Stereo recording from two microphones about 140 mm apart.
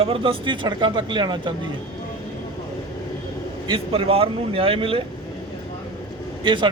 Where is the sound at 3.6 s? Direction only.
40° right (ahead or behind).